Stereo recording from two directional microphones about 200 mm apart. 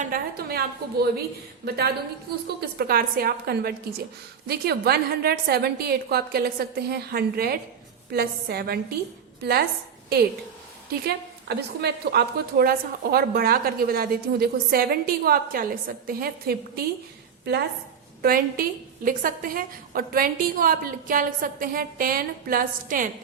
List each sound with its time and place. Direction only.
0.0 s a woman's voice: 45° right (ahead or behind)
11.0 s a woman's voice: 55° right (ahead or behind)
18.2 s a woman's voice: 50° right (ahead or behind)